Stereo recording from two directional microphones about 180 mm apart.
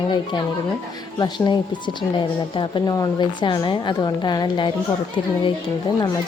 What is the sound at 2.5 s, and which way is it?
Speech, 25° left (ahead or behind).